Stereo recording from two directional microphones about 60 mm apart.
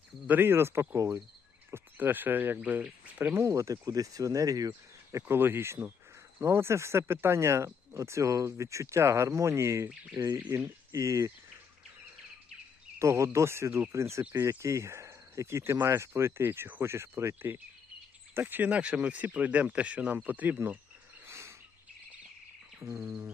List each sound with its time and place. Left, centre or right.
0.3 s speech: right
2.0 s speech: right
3.4 s speech: right
5.4 s speech: right
10.9 s speech: right
13.0 s speech: right
18.3 s speech: right
21.2 s bird: right
22.8 s speech: right